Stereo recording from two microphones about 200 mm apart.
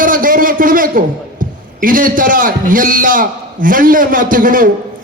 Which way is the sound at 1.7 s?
45° right (ahead or behind).